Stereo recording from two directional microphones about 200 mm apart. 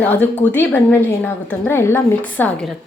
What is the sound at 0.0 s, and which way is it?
A woman's voice, 10° left (ahead or behind).